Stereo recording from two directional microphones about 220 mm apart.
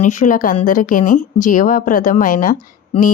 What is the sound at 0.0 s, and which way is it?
A woman's voice, 35° left (ahead or behind).